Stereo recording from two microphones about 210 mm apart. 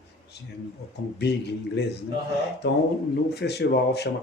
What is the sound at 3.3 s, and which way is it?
Speech, 55° left (ahead or behind).